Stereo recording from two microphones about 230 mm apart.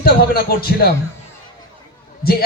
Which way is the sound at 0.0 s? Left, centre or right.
Left.